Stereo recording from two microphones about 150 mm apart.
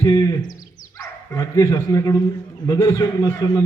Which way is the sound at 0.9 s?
20° left (ahead or behind).